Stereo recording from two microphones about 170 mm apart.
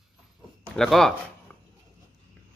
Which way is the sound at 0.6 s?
5° left (ahead or behind).